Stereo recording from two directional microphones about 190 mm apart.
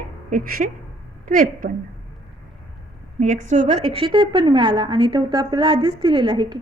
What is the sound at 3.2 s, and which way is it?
A woman's voice, 40° right (ahead or behind).